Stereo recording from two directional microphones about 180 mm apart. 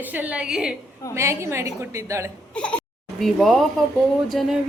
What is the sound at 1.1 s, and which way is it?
A woman's voice, 15° right (ahead or behind).